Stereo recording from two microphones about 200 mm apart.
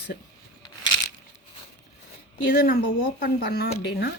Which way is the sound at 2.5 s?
50° left (ahead or behind).